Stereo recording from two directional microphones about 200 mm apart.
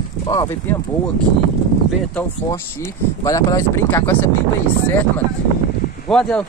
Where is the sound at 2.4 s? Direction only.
10° left (ahead or behind).